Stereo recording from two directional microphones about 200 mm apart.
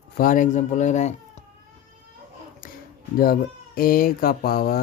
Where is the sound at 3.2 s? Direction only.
45° left (ahead or behind).